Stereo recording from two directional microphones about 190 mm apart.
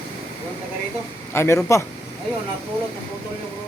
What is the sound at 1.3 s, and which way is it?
Speech, 15° left (ahead or behind).